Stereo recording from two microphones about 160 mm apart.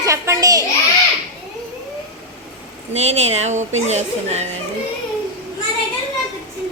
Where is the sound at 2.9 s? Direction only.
45° right (ahead or behind).